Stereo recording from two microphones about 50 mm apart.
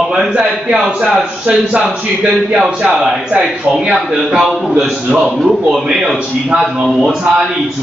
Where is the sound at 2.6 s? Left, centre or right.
Centre.